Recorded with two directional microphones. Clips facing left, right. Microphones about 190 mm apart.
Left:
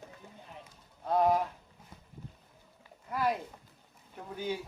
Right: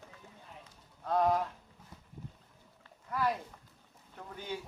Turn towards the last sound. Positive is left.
turn(degrees=10)  # may be behind; listen again after turning